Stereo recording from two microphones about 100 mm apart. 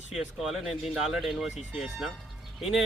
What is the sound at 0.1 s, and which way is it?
Speech, centre (ahead or behind).